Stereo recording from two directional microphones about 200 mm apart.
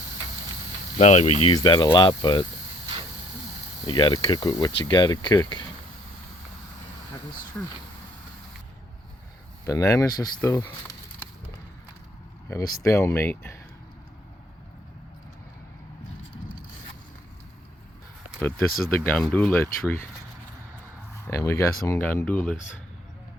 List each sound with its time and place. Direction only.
0.9 s speech: 35° left (ahead or behind)
1.5 s speech: 20° left (ahead or behind)
3.8 s speech: 20° left (ahead or behind)
7.6 s speech: 5° left (ahead or behind)
9.6 s speech: 15° left (ahead or behind)
12.5 s speech: 15° left (ahead or behind)
18.3 s speech: 10° left (ahead or behind)
21.2 s speech: 15° left (ahead or behind)